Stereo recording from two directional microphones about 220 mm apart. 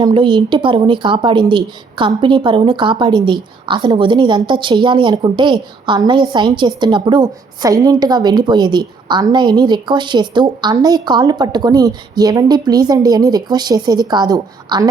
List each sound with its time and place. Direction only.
0.0 s a woman's voice: 20° right (ahead or behind)